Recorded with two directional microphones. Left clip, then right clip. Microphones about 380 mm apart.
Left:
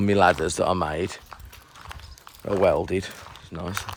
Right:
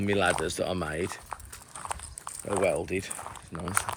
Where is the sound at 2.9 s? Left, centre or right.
Left.